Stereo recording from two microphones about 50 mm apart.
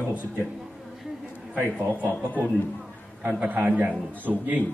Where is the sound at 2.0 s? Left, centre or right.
Right.